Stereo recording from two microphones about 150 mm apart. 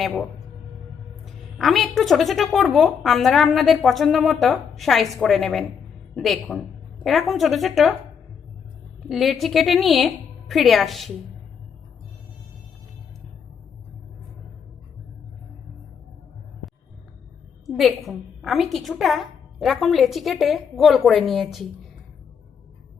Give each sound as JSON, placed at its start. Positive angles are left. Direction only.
{"t": 0.0, "sound": "a woman's voice", "side_deg": 0}
{"t": 9.0, "sound": "a woman's voice", "side_deg": 0}
{"t": 17.7, "sound": "a woman's voice", "side_deg": 0}